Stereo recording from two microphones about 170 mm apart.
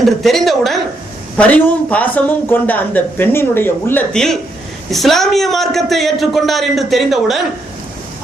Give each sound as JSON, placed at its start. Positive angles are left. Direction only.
{"t": 0.0, "sound": "a man's voice", "side_deg": 0}